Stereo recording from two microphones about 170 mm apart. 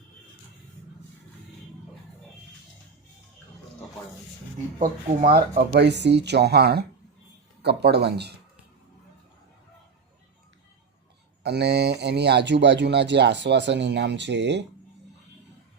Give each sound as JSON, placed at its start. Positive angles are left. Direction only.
{"t": 5.3, "sound": "speech", "side_deg": -65}
{"t": 11.4, "sound": "speech", "side_deg": -80}